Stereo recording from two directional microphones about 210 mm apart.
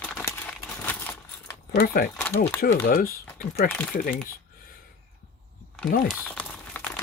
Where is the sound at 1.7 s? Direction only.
45° left (ahead or behind).